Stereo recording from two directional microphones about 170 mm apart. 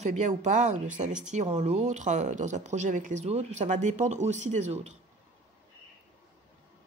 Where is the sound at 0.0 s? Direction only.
45° right (ahead or behind).